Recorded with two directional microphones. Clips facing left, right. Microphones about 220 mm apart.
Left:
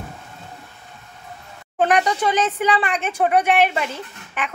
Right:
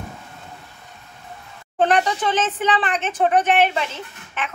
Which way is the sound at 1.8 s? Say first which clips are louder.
Even; 10° left (ahead or behind).